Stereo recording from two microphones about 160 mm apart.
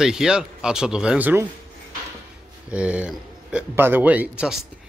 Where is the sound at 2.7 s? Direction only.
10° right (ahead or behind).